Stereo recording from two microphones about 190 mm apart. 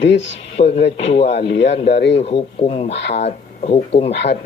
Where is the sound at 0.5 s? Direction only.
35° left (ahead or behind).